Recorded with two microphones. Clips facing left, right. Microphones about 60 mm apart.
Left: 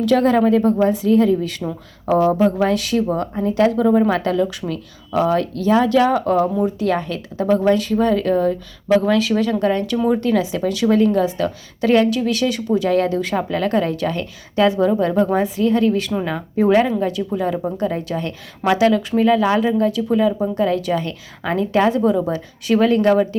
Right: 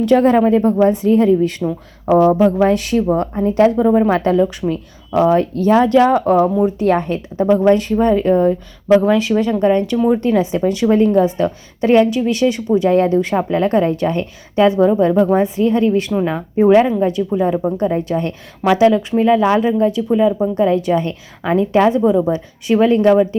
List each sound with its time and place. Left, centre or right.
0.0 s a woman's voice: right